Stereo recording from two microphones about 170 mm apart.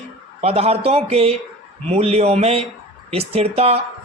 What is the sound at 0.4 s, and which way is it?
A woman's voice, 35° right (ahead or behind).